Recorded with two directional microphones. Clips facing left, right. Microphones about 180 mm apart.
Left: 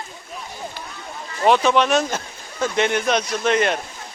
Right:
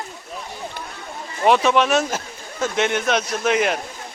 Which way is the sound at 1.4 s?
Centre (ahead or behind).